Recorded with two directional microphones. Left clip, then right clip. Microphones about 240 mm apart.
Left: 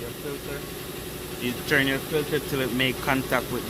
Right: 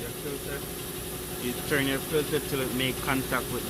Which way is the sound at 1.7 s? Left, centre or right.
Left.